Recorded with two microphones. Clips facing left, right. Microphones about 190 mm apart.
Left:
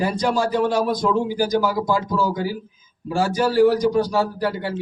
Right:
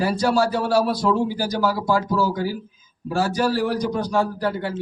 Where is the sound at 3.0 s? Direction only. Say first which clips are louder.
Left 1 dB; 15° left (ahead or behind).